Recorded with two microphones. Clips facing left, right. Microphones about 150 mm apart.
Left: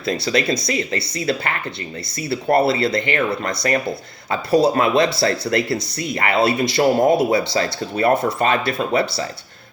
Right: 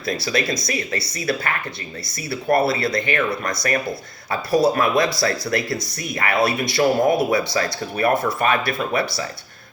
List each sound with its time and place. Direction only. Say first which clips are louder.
0.0 s speech: left 3 dB; 30° left (ahead or behind)